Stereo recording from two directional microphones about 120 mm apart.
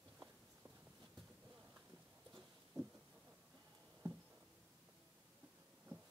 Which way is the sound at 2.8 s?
30° right (ahead or behind).